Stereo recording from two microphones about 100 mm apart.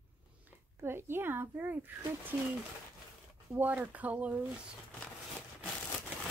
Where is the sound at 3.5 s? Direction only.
20° right (ahead or behind).